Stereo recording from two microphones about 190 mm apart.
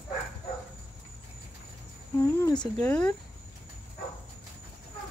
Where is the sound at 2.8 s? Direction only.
5° left (ahead or behind).